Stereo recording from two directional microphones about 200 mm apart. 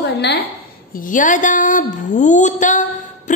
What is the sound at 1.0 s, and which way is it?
A woman's voice, 40° left (ahead or behind).